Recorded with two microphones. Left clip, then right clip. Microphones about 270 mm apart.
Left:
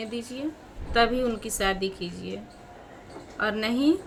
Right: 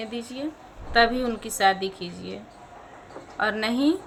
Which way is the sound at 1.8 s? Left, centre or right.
Right.